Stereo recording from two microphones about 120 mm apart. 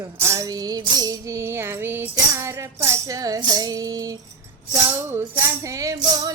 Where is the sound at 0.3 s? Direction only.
30° right (ahead or behind).